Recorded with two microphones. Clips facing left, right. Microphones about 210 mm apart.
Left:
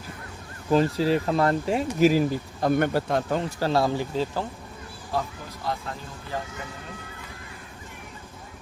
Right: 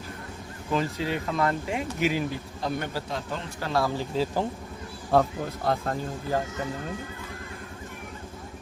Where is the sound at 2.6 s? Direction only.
55° left (ahead or behind).